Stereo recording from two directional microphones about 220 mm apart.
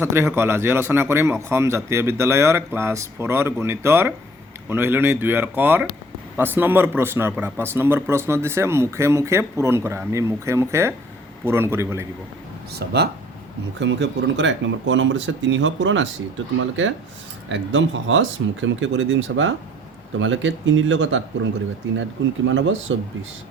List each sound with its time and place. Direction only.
0.0 s speech: 10° right (ahead or behind)
12.7 s speech: 45° right (ahead or behind)
22.4 s speech: 60° right (ahead or behind)